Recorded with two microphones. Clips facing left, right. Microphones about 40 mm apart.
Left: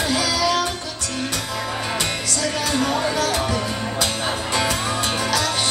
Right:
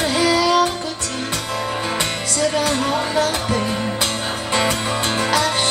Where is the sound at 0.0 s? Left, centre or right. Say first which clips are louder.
Right 4 dB; right.